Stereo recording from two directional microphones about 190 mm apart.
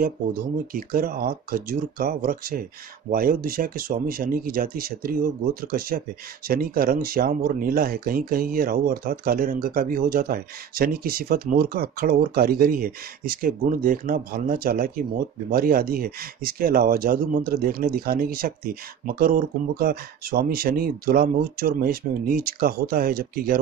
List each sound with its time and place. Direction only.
0.0 s speech: 50° right (ahead or behind)